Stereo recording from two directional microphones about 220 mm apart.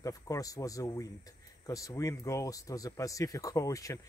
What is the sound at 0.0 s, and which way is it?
Speech, 15° left (ahead or behind).